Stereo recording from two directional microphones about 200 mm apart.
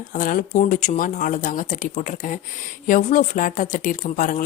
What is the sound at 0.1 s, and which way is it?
A woman's voice, 45° left (ahead or behind).